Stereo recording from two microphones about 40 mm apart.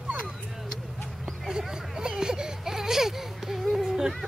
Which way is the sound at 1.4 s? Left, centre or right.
Centre.